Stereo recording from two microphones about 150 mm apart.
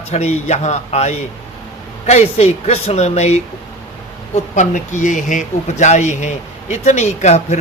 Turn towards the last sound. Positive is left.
turn(degrees=50)  # may be behind; listen again after turning